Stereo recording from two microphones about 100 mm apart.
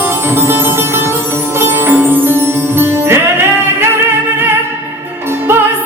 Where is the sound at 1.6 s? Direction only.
20° right (ahead or behind).